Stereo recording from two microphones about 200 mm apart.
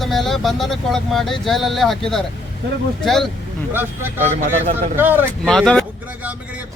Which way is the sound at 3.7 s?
10° right (ahead or behind).